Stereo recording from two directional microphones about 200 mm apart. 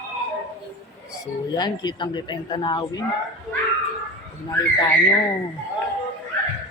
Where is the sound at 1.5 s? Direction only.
20° left (ahead or behind).